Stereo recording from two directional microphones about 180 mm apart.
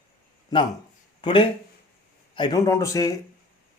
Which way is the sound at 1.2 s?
30° left (ahead or behind).